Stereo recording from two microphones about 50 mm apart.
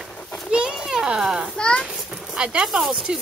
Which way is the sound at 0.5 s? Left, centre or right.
Centre.